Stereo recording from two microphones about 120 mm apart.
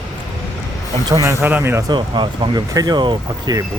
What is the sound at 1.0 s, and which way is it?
Speech, 30° right (ahead or behind).